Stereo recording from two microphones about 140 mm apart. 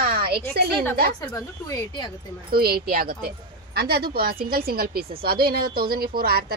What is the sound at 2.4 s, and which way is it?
A woman's voice, 90° right.